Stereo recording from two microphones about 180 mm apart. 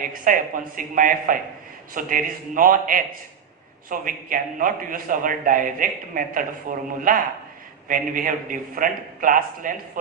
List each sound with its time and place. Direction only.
0.3 s a man's voice: 50° right (ahead or behind)